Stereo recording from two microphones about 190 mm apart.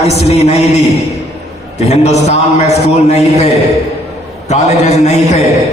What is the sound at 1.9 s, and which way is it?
A man's voice, 35° left (ahead or behind).